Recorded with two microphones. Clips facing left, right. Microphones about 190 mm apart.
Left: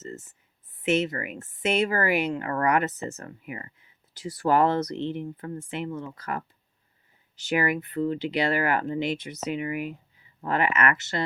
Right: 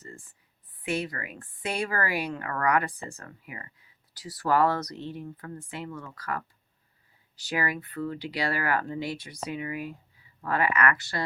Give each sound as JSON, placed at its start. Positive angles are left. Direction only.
{"t": 0.0, "sound": "speech", "side_deg": 25}